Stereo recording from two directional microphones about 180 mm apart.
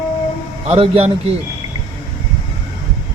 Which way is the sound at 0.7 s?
35° right (ahead or behind).